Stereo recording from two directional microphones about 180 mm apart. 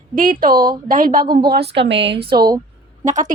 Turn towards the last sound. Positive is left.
turn(degrees=-45)  # may be behind; listen again after turning